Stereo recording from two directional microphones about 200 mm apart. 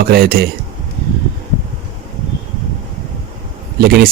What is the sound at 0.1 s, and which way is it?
Speech, 45° right (ahead or behind).